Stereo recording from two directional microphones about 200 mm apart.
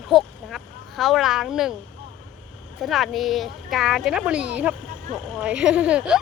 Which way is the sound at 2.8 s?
Centre (ahead or behind).